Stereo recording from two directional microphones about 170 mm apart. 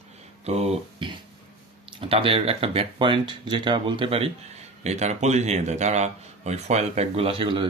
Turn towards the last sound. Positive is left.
turn(degrees=-30)  # may be behind; listen again after turning